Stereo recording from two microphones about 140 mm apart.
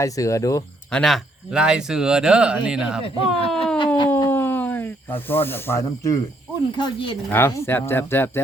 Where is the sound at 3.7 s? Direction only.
35° left (ahead or behind).